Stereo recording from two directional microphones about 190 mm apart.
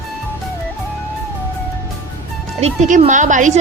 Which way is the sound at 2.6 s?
40° right (ahead or behind).